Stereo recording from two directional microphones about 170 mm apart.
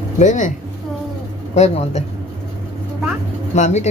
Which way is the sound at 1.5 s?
40° left (ahead or behind).